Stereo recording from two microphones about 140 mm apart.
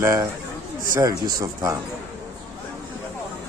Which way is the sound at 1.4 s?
25° right (ahead or behind).